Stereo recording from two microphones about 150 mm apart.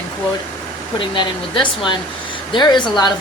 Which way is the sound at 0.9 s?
30° left (ahead or behind).